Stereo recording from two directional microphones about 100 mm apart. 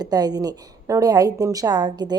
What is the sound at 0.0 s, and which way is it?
A woman's voice, 40° right (ahead or behind).